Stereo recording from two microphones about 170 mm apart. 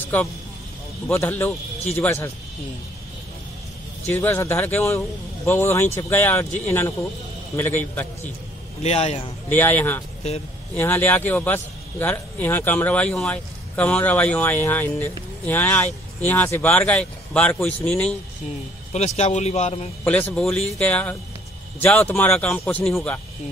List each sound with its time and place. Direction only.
1.1 s a man's voice: 15° left (ahead or behind)
4.1 s a man's voice: 10° left (ahead or behind)
8.8 s speech: 40° left (ahead or behind)
9.5 s a man's voice: 10° left (ahead or behind)
18.9 s speech: 40° left (ahead or behind)
20.1 s a man's voice: 5° left (ahead or behind)